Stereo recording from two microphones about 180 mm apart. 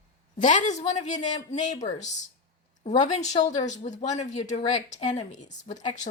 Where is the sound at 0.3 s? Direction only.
45° left (ahead or behind).